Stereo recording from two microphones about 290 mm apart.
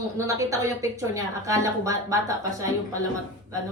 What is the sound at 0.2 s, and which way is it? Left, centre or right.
A woman's voice, centre.